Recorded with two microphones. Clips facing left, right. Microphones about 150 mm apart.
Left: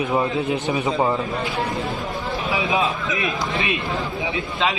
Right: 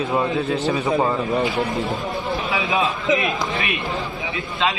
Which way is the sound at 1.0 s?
5° left (ahead or behind).